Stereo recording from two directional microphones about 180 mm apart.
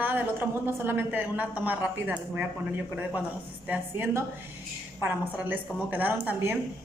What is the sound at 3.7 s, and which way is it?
A woman's voice, 10° right (ahead or behind).